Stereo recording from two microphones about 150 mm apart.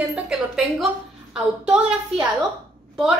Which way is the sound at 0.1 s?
5° right (ahead or behind).